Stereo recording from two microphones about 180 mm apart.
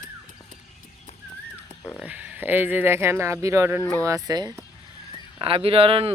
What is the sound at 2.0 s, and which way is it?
Speech, 10° right (ahead or behind).